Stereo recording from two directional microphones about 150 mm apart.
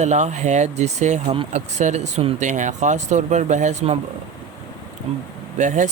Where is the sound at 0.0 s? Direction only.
50° right (ahead or behind).